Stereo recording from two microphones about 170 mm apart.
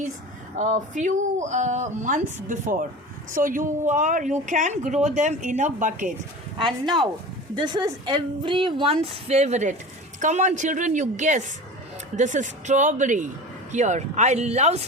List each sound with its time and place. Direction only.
0.6 s a woman's voice: 45° right (ahead or behind)
6.8 s a woman's voice: 25° right (ahead or behind)